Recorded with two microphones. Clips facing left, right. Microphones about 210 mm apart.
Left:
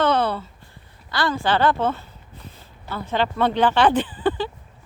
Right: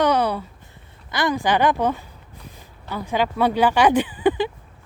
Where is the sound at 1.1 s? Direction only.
15° right (ahead or behind).